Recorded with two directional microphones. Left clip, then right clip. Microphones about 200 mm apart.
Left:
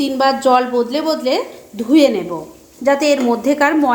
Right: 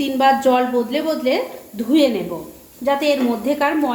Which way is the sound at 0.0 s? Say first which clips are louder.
Left 1 dB; 25° left (ahead or behind).